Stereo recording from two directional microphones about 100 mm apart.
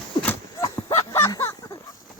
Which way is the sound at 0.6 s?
35° left (ahead or behind).